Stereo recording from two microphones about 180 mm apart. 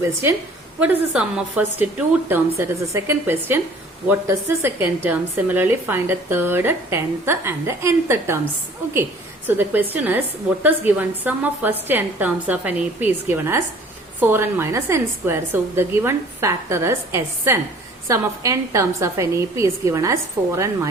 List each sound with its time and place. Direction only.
0.0 s a woman's voice: 15° right (ahead or behind)
9.5 s a woman's voice: 10° right (ahead or behind)